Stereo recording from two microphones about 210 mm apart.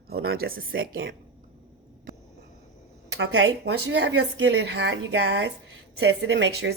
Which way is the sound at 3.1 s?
65° right (ahead or behind).